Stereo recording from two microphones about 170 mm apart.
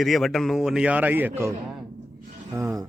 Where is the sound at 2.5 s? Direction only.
15° right (ahead or behind).